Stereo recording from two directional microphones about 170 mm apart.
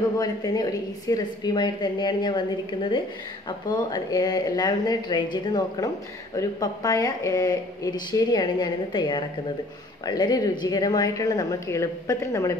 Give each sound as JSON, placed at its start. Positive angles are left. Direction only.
{"t": 0.2, "sound": "a woman's voice", "side_deg": 25}